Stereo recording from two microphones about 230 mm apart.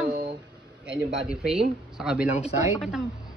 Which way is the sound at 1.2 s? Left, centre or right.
Centre.